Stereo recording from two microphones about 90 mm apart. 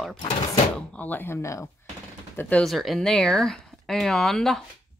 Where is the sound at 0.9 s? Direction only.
20° left (ahead or behind).